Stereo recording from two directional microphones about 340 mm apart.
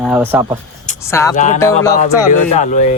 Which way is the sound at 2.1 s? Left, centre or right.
Centre.